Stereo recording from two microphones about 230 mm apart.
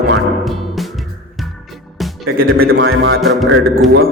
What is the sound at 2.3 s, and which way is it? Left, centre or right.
Music, right.